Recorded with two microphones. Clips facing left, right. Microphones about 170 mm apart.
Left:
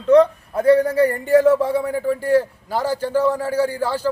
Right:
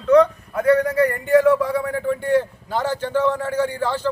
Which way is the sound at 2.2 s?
5° left (ahead or behind).